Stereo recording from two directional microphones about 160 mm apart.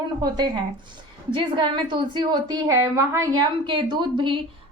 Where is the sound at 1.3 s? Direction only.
30° right (ahead or behind).